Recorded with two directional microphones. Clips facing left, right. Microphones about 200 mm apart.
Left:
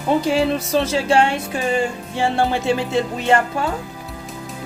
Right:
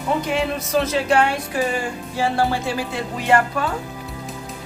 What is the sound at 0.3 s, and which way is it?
A woman's voice, 30° left (ahead or behind).